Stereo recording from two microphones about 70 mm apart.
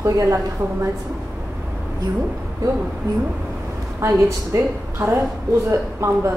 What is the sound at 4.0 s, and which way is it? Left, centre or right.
A woman's voice, right.